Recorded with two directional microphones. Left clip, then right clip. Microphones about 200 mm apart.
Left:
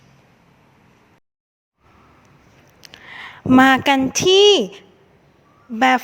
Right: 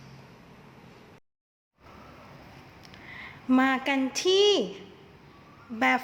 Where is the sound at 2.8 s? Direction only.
40° left (ahead or behind).